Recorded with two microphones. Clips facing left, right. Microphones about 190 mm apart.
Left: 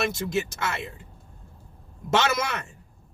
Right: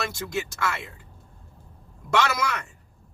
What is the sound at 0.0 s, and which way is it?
Speech, 20° left (ahead or behind).